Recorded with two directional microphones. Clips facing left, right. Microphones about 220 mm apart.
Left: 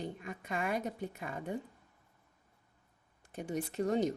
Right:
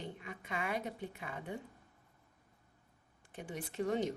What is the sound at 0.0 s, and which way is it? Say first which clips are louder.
A woman's voice: left 4 dB; 45° left (ahead or behind).